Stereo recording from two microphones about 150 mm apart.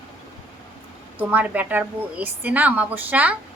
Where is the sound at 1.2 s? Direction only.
10° right (ahead or behind).